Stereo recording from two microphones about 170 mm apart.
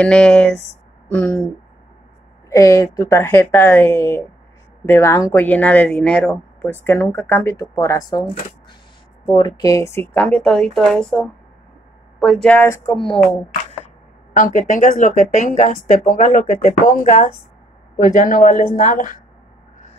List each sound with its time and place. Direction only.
0.0 s speech: 5° left (ahead or behind)
2.5 s speech: 20° left (ahead or behind)
14.3 s speech: 50° left (ahead or behind)